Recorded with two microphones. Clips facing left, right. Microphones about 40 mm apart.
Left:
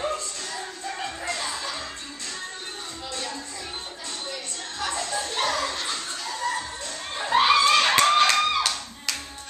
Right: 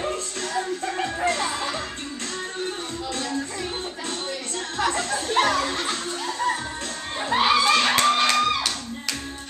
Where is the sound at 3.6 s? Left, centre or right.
Right.